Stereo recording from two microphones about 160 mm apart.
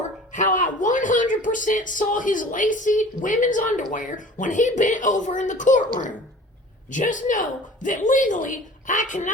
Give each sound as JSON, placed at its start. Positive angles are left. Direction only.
{"t": 0.3, "sound": "speech", "side_deg": 50}